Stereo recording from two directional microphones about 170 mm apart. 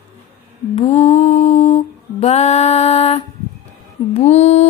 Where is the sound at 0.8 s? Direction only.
40° left (ahead or behind).